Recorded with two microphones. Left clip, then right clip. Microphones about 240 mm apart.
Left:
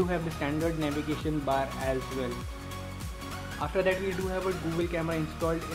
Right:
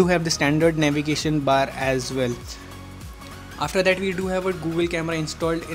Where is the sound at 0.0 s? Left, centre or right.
Right.